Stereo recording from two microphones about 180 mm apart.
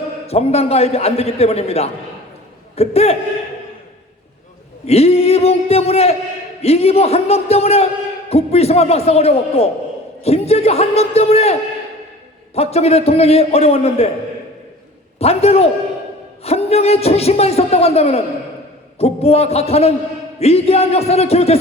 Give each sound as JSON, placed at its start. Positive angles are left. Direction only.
{"t": 0.3, "sound": "a man's voice", "side_deg": 35}
{"t": 4.9, "sound": "a man's voice", "side_deg": 35}
{"t": 12.5, "sound": "a man's voice", "side_deg": 35}
{"t": 15.2, "sound": "a man's voice", "side_deg": 35}